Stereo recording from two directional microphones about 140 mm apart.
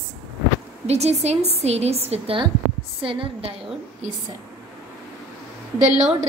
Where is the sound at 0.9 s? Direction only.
50° right (ahead or behind).